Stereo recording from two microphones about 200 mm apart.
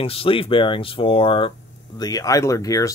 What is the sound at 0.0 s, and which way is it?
Speech, 30° left (ahead or behind).